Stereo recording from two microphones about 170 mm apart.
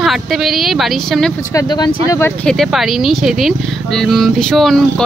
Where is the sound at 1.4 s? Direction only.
20° left (ahead or behind).